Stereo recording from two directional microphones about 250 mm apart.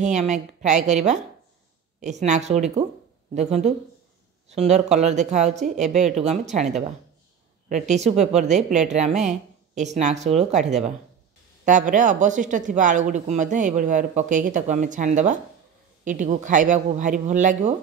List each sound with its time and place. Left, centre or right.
0.0 s speech: right
2.0 s speech: right